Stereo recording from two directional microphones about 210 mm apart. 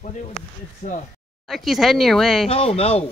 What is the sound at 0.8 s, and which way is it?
Speech, 40° left (ahead or behind).